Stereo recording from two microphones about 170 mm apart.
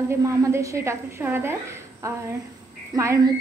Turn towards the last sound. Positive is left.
turn(degrees=-25)  # may be behind; listen again after turning